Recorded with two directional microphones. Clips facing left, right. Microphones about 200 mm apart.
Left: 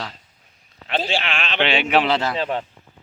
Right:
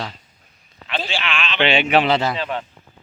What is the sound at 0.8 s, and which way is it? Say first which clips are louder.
Speech: left 2 dB; 45° left (ahead or behind).